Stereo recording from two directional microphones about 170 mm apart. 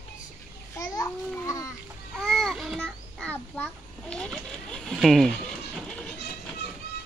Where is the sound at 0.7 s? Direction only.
20° left (ahead or behind).